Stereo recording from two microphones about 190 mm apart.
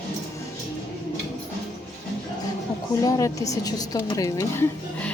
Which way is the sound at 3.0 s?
20° left (ahead or behind).